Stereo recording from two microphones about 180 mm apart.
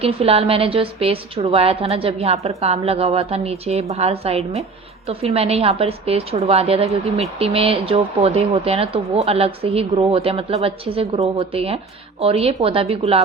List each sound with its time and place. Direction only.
0.0 s a woman's voice: 35° right (ahead or behind)